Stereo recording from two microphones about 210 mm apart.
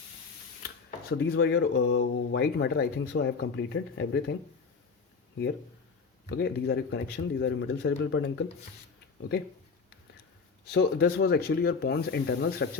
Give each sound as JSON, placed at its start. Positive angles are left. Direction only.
{"t": 0.9, "sound": "speech", "side_deg": 55}
{"t": 6.2, "sound": "speech", "side_deg": 50}
{"t": 10.7, "sound": "speech", "side_deg": 50}